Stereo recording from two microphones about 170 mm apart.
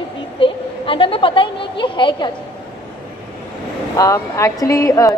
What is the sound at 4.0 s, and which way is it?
A woman's voice, 20° left (ahead or behind).